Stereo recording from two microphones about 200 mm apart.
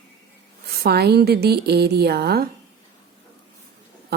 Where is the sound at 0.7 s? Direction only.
50° right (ahead or behind).